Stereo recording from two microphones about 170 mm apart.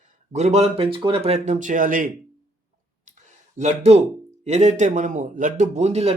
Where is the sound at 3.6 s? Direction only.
40° right (ahead or behind).